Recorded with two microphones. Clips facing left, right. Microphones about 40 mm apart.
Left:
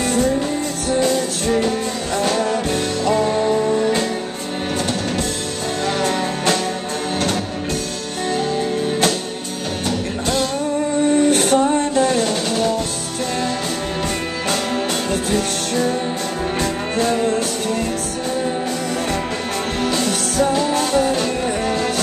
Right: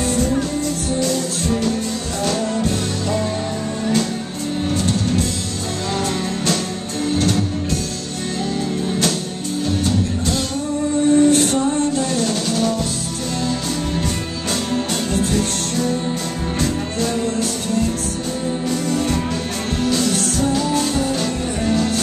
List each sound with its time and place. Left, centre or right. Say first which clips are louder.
0.9 s music: left 5 dB; left
7.2 s music: right 2 dB; left
11.2 s music: even; left
11.6 s music: left 3 dB; left
14.7 s music: left 1 dB; left
16.5 s music: even; centre
19.9 s music: right 1 dB; centre